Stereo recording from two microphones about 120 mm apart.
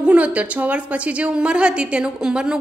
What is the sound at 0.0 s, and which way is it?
A woman's voice, 10° right (ahead or behind).